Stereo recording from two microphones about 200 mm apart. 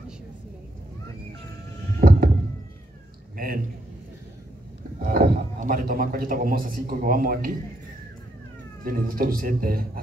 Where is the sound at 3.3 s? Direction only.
45° right (ahead or behind).